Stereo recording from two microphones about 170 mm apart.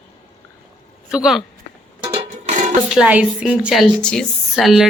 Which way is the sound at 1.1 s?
5° right (ahead or behind).